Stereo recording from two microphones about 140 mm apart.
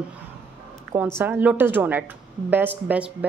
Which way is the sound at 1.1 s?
10° right (ahead or behind).